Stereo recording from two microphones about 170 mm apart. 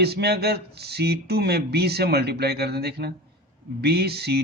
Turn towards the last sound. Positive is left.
turn(degrees=-70)  # may be behind; listen again after turning